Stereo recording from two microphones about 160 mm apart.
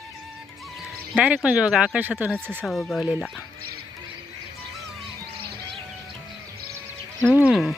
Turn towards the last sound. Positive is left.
turn(degrees=0)  # may be behind; listen again after turning